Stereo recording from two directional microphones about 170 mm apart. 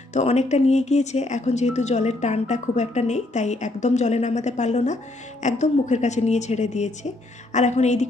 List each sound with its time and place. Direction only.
0.1 s speech: 40° left (ahead or behind)